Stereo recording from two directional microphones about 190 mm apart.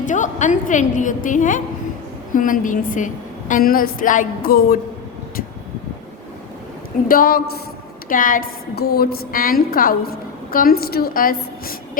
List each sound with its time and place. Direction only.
0.0 s a woman's voice: 40° left (ahead or behind)
7.1 s a woman's voice: 50° left (ahead or behind)